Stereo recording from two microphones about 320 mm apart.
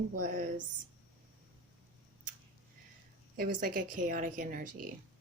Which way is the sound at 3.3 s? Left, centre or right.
Right.